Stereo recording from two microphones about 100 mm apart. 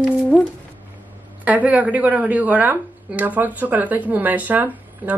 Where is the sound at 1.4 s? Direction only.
15° right (ahead or behind).